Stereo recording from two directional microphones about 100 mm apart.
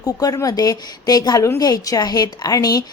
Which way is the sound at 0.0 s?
35° left (ahead or behind).